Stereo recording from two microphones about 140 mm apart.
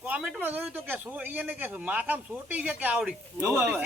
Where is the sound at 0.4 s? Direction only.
15° right (ahead or behind).